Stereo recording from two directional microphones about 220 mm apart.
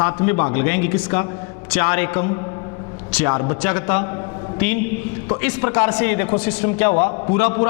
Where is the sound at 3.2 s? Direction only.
25° left (ahead or behind).